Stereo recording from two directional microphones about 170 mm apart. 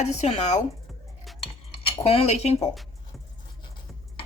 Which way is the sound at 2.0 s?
40° left (ahead or behind).